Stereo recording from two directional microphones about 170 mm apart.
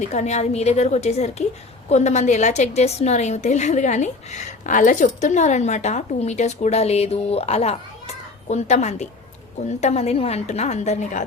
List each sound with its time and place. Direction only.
0.1 s a woman's voice: 40° left (ahead or behind)